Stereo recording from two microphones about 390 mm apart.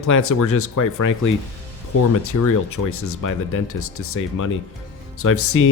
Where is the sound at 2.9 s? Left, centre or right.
Left.